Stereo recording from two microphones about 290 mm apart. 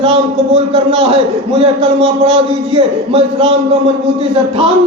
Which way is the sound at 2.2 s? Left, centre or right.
Centre.